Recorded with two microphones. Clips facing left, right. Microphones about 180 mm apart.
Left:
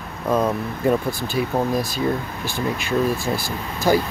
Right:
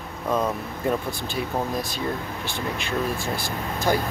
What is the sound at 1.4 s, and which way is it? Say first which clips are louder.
Speech: left 6 dB; 65° left (ahead or behind).